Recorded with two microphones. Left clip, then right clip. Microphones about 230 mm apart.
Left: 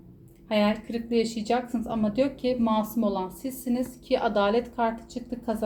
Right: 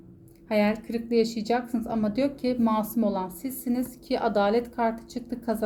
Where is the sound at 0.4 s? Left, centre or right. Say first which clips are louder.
Even; right.